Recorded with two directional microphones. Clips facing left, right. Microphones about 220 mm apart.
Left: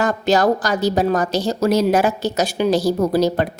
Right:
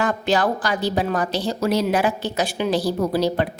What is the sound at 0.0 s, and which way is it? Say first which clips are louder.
A woman's voice: left 4 dB; 40° left (ahead or behind).